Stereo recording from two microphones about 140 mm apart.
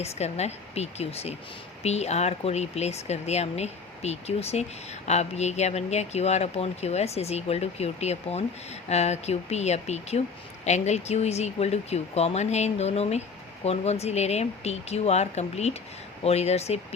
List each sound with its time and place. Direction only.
0.0 s speech: 50° left (ahead or behind)